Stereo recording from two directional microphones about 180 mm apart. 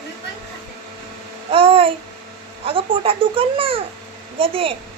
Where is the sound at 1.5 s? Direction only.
30° right (ahead or behind).